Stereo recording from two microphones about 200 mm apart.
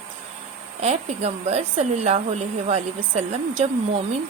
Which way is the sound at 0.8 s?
35° right (ahead or behind).